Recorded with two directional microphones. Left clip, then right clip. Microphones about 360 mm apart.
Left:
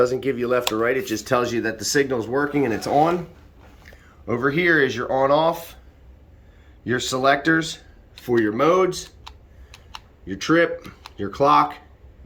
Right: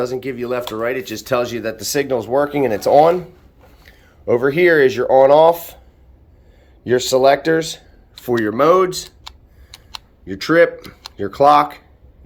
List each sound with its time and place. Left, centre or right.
0.0 s speech: centre
6.8 s speech: centre
10.2 s speech: centre